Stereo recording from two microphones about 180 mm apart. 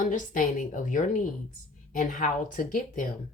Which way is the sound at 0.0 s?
45° left (ahead or behind).